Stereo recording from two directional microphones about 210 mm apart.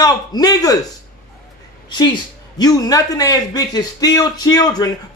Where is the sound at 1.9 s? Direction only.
20° left (ahead or behind).